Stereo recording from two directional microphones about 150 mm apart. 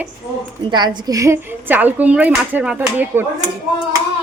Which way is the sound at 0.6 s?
30° right (ahead or behind).